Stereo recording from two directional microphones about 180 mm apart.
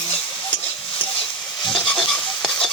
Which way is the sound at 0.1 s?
30° left (ahead or behind).